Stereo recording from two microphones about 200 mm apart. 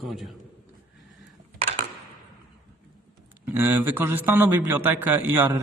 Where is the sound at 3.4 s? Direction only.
10° right (ahead or behind).